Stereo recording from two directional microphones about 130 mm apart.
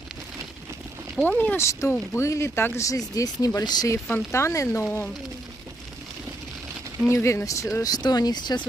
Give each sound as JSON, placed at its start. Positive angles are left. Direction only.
{"t": 1.1, "sound": "speech", "side_deg": 10}
{"t": 1.7, "sound": "speech", "side_deg": 20}
{"t": 7.1, "sound": "speech", "side_deg": 20}